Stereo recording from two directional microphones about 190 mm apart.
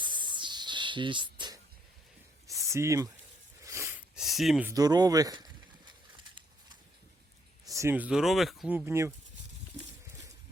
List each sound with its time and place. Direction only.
0.0 s spray: 25° right (ahead or behind)
2.5 s a sound: 15° right (ahead or behind)
3.6 s sniff: 15° right (ahead or behind)
4.7 s speech: 20° right (ahead or behind)
7.7 s speech: 15° right (ahead or behind)